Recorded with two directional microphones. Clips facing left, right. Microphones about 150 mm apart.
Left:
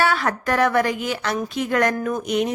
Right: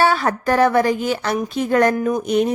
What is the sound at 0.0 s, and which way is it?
A woman's voice, 30° right (ahead or behind).